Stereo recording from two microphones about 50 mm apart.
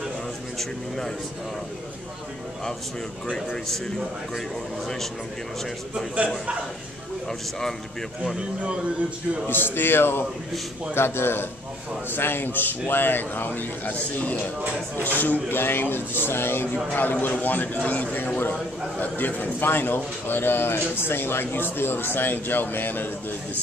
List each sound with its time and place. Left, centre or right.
0.6 s a man's voice: centre
3.6 s a man's voice: centre
9.5 s a man's voice: left